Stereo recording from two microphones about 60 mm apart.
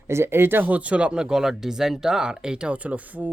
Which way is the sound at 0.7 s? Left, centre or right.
Right.